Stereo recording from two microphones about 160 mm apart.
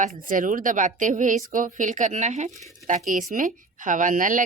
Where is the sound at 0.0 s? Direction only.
55° right (ahead or behind).